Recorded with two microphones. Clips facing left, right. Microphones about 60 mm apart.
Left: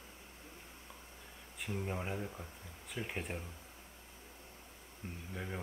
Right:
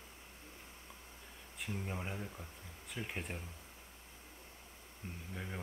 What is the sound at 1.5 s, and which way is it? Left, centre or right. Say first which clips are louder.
Speech: left 3 dB; centre.